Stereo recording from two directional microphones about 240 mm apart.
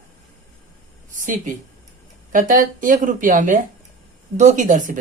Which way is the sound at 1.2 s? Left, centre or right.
Right.